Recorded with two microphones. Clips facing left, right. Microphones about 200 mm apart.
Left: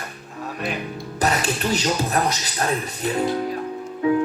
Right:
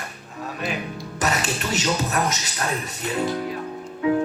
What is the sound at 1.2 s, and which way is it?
Speech, 35° left (ahead or behind).